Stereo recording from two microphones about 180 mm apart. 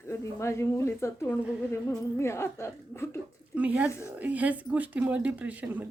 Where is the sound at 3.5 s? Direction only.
5° right (ahead or behind).